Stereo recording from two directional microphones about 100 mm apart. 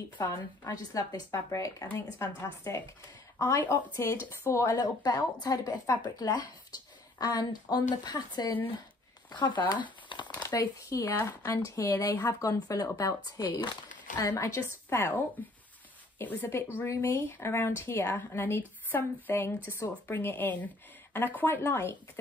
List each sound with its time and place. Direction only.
0.2 s a woman's voice: 40° left (ahead or behind)
4.7 s speech: 40° left (ahead or behind)
14.2 s a woman's voice: 30° left (ahead or behind)